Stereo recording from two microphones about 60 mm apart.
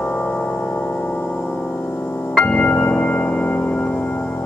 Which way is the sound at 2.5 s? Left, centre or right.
Left.